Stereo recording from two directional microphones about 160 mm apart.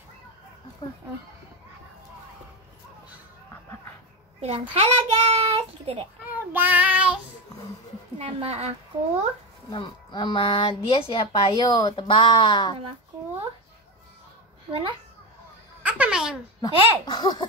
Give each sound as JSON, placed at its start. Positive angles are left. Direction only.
{"t": 4.4, "sound": "a child's voice", "side_deg": -40}
{"t": 6.3, "sound": "child singing", "side_deg": -10}
{"t": 8.2, "sound": "a child's voice", "side_deg": -40}
{"t": 9.7, "sound": "speech", "side_deg": 30}
{"t": 14.7, "sound": "a child's voice", "side_deg": -35}
{"t": 15.8, "sound": "a sound", "side_deg": -5}
{"t": 16.6, "sound": "a child's voice", "side_deg": 25}